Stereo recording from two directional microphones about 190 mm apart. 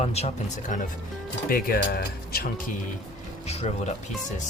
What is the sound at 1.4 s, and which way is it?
Speech, 50° left (ahead or behind).